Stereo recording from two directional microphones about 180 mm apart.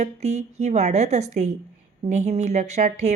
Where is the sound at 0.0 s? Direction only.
40° right (ahead or behind).